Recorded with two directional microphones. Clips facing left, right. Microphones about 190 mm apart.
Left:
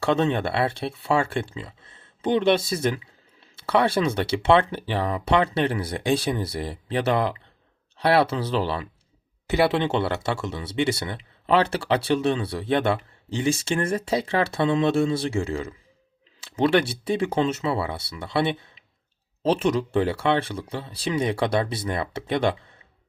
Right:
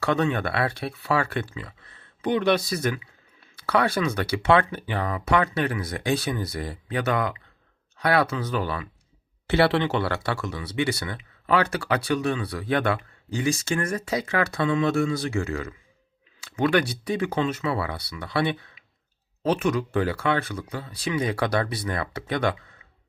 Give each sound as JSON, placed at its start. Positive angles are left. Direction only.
{"t": 0.0, "sound": "speech", "side_deg": 25}